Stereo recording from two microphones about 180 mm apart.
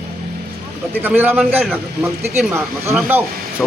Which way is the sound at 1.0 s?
10° right (ahead or behind).